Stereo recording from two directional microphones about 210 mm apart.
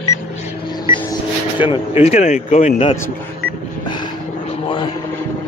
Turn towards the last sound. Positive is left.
turn(degrees=25)  # may be behind; listen again after turning